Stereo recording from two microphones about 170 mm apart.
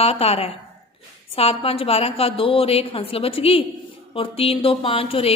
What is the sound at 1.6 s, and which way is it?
A woman's voice, 35° left (ahead or behind).